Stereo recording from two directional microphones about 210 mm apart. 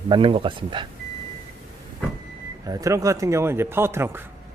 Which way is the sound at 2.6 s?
15° right (ahead or behind).